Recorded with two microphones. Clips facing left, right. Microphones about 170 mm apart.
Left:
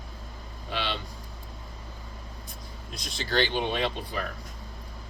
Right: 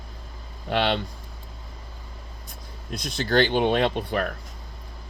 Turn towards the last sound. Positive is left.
turn(degrees=-60)  # may be behind; listen again after turning